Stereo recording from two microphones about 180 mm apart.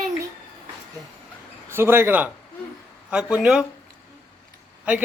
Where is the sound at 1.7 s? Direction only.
15° right (ahead or behind).